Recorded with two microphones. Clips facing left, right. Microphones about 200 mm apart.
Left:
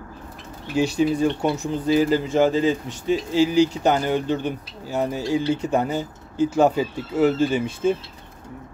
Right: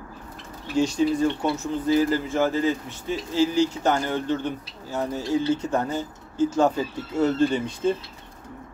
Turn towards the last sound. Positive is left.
turn(degrees=5)  # may be behind; listen again after turning